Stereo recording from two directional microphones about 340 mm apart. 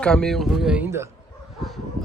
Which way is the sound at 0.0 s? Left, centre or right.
Centre.